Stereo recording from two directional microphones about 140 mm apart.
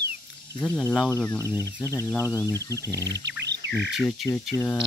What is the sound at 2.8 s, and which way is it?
Bird, 25° right (ahead or behind).